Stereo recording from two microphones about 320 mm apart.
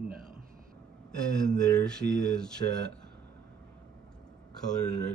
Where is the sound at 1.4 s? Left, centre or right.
Centre.